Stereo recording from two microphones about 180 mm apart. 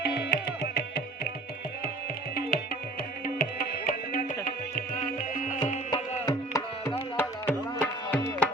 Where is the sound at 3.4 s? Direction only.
50° left (ahead or behind).